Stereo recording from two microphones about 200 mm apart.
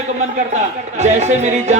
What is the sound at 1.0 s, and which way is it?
Music, 35° right (ahead or behind).